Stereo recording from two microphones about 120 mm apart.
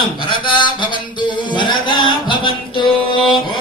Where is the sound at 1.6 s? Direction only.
40° left (ahead or behind).